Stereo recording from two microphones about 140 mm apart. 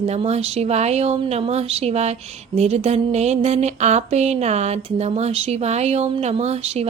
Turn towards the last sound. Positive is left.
turn(degrees=-50)  # may be behind; listen again after turning